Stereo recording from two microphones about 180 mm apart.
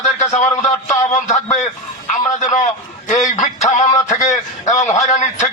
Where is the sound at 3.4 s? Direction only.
40° left (ahead or behind).